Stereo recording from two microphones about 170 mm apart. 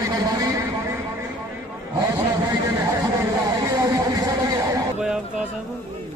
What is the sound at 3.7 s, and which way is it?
Music, 20° right (ahead or behind).